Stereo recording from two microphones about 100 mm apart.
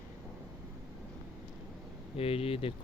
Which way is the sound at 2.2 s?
75° left (ahead or behind).